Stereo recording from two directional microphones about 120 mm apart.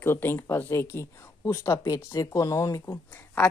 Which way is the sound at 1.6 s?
30° left (ahead or behind).